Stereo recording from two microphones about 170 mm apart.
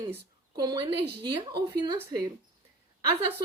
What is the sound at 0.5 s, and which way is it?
Speech, 25° right (ahead or behind).